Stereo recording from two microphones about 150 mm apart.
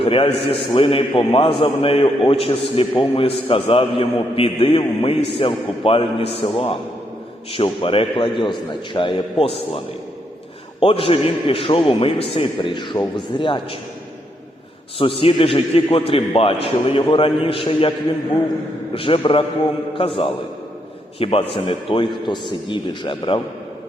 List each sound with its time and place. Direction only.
0.0 s a man's voice: 40° left (ahead or behind)
14.9 s a man's voice: 40° left (ahead or behind)
18.9 s a man's voice: 35° left (ahead or behind)